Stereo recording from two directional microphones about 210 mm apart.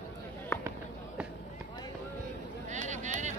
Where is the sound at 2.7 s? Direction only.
35° right (ahead or behind).